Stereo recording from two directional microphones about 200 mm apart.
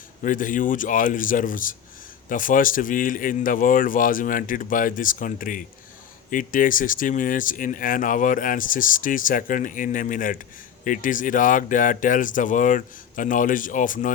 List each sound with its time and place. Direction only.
0.2 s speech: 40° left (ahead or behind)